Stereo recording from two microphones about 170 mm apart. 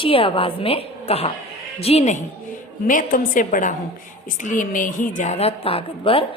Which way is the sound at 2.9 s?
50° left (ahead or behind).